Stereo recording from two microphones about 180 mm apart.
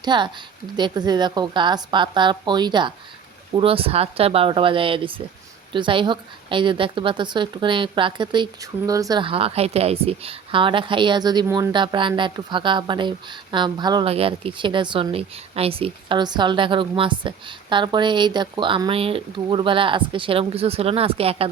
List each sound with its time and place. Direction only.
0.0 s a woman's voice: 25° right (ahead or behind)